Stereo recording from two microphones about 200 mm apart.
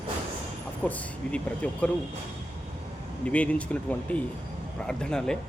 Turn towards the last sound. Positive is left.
turn(degrees=5)  # may be behind; listen again after turning